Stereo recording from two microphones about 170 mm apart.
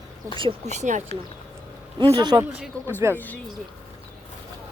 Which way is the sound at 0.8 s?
45° right (ahead or behind).